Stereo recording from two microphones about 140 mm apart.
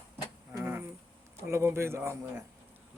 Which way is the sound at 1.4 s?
20° right (ahead or behind).